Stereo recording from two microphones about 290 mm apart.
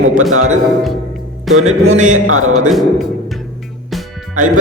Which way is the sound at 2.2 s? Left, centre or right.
Right.